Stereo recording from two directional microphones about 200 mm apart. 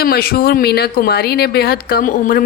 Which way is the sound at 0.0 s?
50° left (ahead or behind).